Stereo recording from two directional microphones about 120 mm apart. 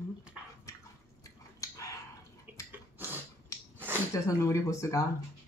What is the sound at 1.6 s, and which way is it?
Dog, 25° left (ahead or behind).